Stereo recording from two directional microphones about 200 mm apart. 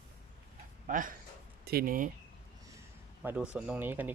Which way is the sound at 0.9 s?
40° right (ahead or behind).